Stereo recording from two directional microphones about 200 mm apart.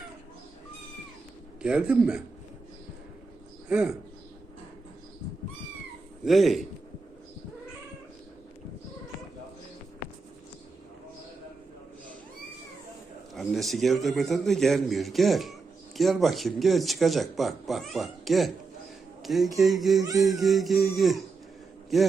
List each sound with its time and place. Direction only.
1.6 s speech: 5° right (ahead or behind)
3.7 s speech: 5° right (ahead or behind)
6.2 s speech: centre (ahead or behind)
13.3 s a man's voice: centre (ahead or behind)
20.0 s a sound: 20° right (ahead or behind)
20.4 s speech: centre (ahead or behind)